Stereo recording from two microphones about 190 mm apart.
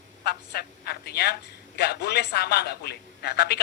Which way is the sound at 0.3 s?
55° left (ahead or behind).